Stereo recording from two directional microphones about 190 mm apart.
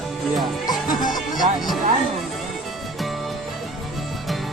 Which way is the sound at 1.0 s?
Centre (ahead or behind).